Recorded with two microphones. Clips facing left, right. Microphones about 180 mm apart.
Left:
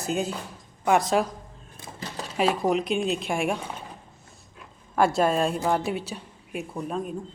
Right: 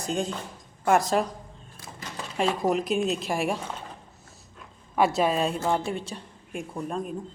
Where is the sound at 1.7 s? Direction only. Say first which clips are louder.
Left 4 dB; 25° left (ahead or behind).